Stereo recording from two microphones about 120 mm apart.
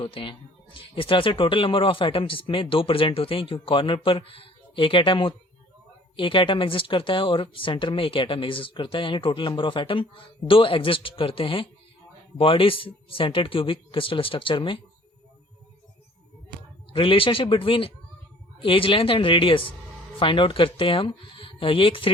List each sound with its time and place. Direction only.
0.0 s speech: 45° left (ahead or behind)
16.9 s speech: 45° left (ahead or behind)